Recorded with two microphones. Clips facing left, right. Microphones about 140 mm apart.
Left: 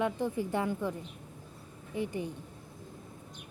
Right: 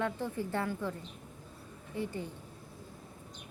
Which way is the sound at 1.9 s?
15° left (ahead or behind).